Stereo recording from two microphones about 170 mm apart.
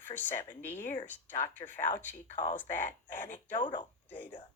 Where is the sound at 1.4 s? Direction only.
15° left (ahead or behind).